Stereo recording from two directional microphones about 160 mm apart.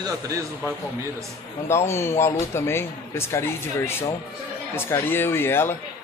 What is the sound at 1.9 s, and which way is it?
Speech, 15° left (ahead or behind).